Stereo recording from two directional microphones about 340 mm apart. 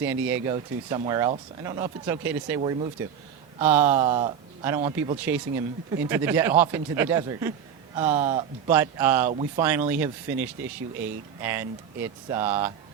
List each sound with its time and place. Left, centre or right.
0.4 s speech: centre
2.6 s speech: centre
3.6 s speech: centre
8.2 s speech: centre